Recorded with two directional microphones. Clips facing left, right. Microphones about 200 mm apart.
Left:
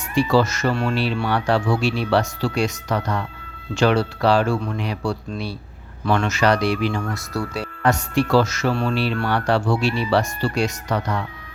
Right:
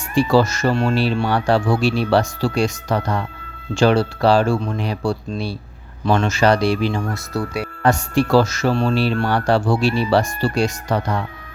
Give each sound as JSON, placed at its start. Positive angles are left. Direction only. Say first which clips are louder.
{"t": 0.1, "sound": "speech", "louder": "right 2 dB", "side_deg": -35}